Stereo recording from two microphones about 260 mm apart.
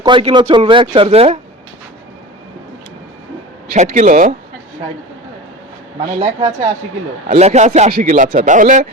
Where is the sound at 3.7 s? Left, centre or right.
Right.